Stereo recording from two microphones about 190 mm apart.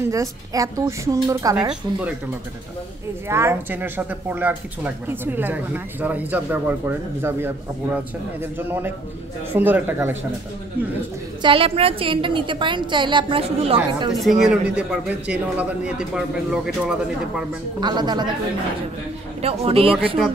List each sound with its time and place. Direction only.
0.1 s speech: 15° right (ahead or behind)
1.7 s speech: 5° right (ahead or behind)
3.3 s speech: 15° right (ahead or behind)
11.4 s a woman's voice: 30° right (ahead or behind)
14.5 s a man's voice: 5° right (ahead or behind)
17.7 s a woman's voice: 20° right (ahead or behind)
19.4 s speech: 30° right (ahead or behind)